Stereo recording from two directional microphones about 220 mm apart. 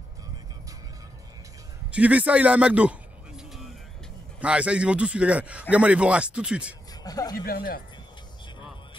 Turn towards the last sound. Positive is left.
turn(degrees=45)  # may be behind; listen again after turning